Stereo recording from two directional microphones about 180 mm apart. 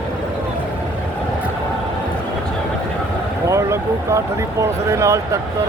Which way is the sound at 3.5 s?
15° right (ahead or behind).